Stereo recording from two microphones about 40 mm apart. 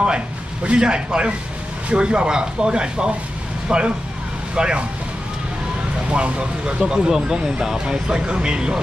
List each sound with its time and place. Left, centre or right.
0.7 s speech: right
6.0 s speech: right